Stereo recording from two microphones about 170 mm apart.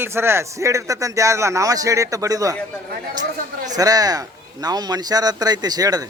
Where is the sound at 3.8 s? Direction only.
20° right (ahead or behind).